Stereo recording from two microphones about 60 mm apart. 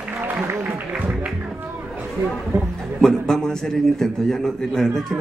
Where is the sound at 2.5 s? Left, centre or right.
Right.